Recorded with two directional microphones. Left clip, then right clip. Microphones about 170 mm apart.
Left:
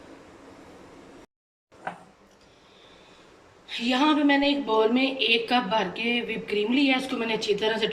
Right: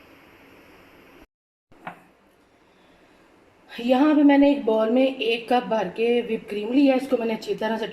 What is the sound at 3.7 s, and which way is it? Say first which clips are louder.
Speech: right 3 dB; 45° right (ahead or behind).